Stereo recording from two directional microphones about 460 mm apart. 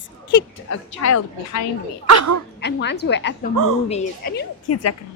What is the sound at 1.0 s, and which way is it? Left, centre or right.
Speech, left.